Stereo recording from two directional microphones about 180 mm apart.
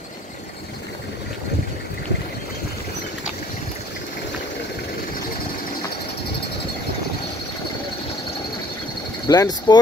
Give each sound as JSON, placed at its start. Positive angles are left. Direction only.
{"t": 9.3, "sound": "speech", "side_deg": 20}